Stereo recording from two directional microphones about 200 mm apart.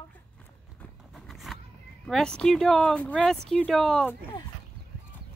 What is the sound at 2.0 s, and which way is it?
Speech, 5° left (ahead or behind).